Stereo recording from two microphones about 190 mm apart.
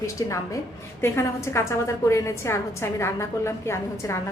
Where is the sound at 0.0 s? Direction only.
15° left (ahead or behind).